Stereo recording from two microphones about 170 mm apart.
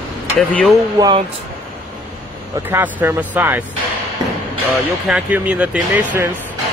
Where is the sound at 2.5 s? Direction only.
10° right (ahead or behind).